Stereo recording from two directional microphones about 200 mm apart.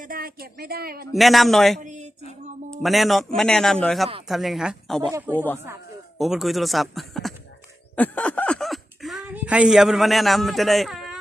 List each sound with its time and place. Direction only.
0.1 s speech: 50° right (ahead or behind)
1.1 s speech: centre (ahead or behind)
1.8 s speech: 40° right (ahead or behind)
2.6 s speech: centre (ahead or behind)